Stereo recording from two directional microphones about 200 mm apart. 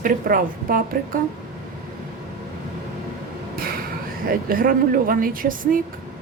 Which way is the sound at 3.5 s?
45° right (ahead or behind).